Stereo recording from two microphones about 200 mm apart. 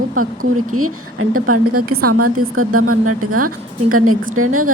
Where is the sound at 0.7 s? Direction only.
90° right.